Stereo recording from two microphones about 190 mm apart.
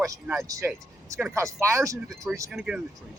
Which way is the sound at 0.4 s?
15° right (ahead or behind).